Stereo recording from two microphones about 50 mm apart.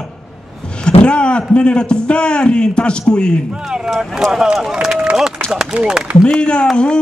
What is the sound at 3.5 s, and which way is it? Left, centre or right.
Speech, centre.